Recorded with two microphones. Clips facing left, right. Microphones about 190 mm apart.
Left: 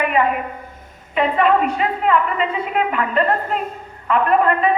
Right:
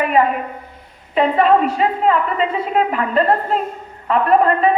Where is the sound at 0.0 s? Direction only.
35° right (ahead or behind).